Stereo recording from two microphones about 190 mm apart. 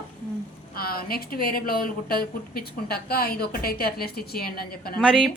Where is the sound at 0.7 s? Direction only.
50° left (ahead or behind).